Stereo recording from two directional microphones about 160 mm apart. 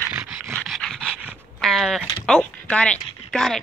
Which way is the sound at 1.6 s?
Centre (ahead or behind).